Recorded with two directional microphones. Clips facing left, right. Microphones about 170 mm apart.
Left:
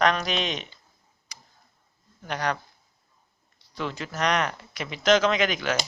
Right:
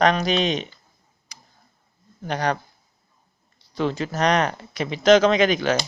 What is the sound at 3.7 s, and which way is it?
Speech, 35° right (ahead or behind).